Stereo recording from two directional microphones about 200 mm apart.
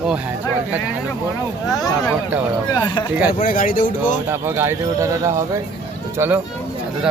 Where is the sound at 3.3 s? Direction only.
45° left (ahead or behind).